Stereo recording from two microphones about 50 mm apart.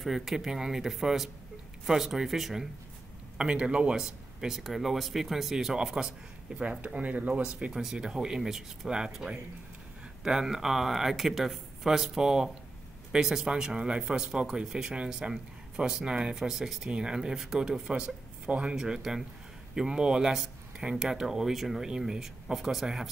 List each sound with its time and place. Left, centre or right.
0.0 s speech: centre
3.3 s speech: centre
3.9 s speech: centre
16.3 s speech: centre